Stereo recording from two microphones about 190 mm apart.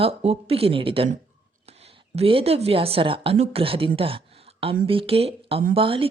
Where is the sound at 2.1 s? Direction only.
30° right (ahead or behind).